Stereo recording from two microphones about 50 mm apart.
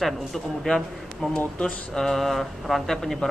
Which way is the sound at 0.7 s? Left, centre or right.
Centre.